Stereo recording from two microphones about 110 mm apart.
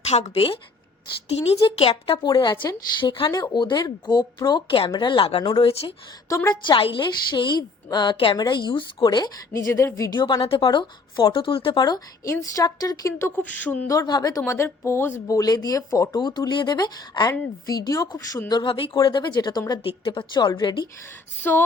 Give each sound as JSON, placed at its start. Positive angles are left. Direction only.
{"t": 0.1, "sound": "a woman's voice", "side_deg": 70}
{"t": 1.6, "sound": "a woman's voice", "side_deg": 60}
{"t": 5.4, "sound": "a woman's voice", "side_deg": 40}
{"t": 6.2, "sound": "a woman's voice", "side_deg": 30}
{"t": 6.7, "sound": "a woman's voice", "side_deg": 50}
{"t": 8.1, "sound": "a woman's voice", "side_deg": 60}
{"t": 8.4, "sound": "speech", "side_deg": 45}
{"t": 10.2, "sound": "a woman's voice", "side_deg": 50}
{"t": 12.2, "sound": "a woman's voice", "side_deg": 30}
{"t": 13.8, "sound": "speech", "side_deg": 35}
{"t": 19.9, "sound": "a woman's voice", "side_deg": 50}
{"t": 21.5, "sound": "female singing", "side_deg": 15}